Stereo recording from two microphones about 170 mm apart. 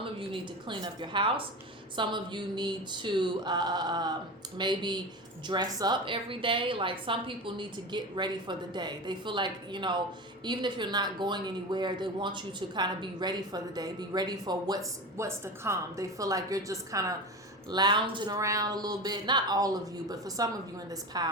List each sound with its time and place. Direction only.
0.0 s speech: 30° right (ahead or behind)